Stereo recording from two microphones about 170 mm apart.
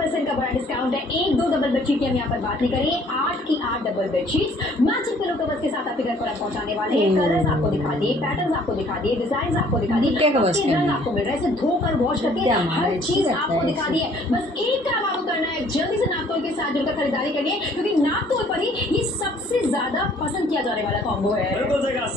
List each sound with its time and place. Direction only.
10.2 s a woman's voice: 40° right (ahead or behind)